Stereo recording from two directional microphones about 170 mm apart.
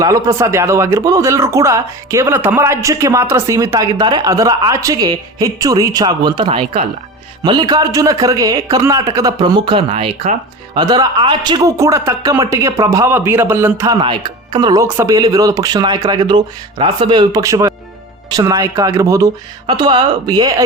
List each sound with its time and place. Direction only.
0.0 s a man's voice: 20° right (ahead or behind); by 10.3 s 35° right (ahead or behind)
10.8 s a man's voice: 25° right (ahead or behind)
14.0 s a man's voice: 30° right (ahead or behind)